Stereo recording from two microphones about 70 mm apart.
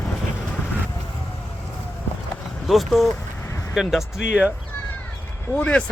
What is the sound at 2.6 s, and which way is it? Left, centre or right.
Speech, centre.